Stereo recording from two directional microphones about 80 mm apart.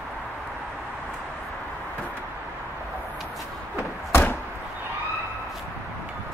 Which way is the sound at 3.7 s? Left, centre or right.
Left.